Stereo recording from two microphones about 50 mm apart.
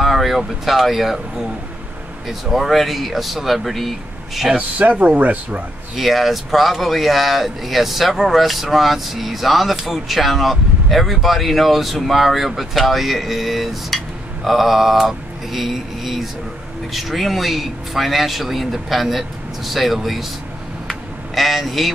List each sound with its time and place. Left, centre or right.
0.0 s speech: centre
2.2 s speech: centre
4.6 s speech: right
5.9 s speech: centre
21.4 s speech: centre